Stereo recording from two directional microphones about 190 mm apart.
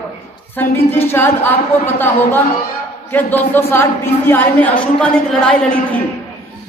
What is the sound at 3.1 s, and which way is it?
A man's voice, 10° left (ahead or behind).